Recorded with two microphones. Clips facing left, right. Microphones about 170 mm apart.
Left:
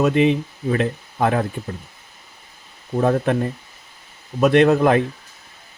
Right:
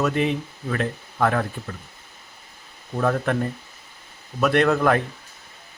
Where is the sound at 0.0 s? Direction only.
20° left (ahead or behind).